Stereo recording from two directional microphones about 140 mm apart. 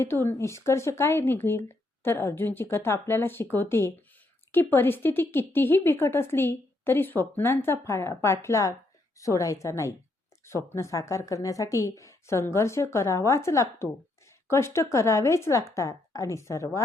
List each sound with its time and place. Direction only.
0.0 s speech: 15° left (ahead or behind)